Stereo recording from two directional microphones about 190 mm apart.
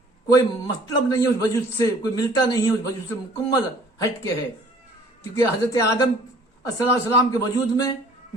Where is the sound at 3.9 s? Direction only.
20° left (ahead or behind).